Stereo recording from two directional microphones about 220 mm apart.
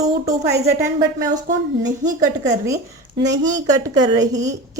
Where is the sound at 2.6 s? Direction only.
15° right (ahead or behind).